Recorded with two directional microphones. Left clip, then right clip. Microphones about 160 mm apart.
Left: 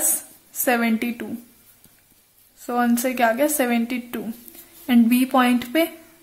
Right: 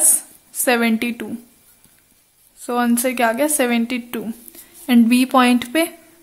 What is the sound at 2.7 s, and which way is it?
A woman's voice, 15° right (ahead or behind).